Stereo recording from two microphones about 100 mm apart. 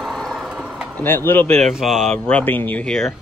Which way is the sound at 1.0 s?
20° left (ahead or behind).